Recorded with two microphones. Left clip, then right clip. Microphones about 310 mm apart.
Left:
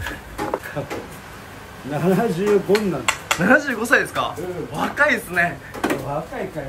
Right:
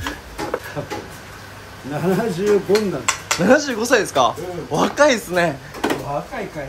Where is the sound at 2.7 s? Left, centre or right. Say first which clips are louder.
Right 1 dB; centre.